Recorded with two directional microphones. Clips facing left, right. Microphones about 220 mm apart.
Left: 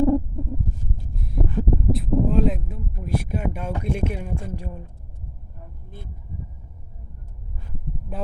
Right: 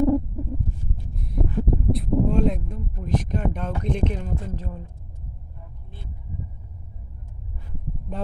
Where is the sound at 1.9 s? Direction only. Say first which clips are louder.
Even; centre (ahead or behind).